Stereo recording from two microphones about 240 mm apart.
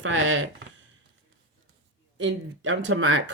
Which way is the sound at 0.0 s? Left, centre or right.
Right.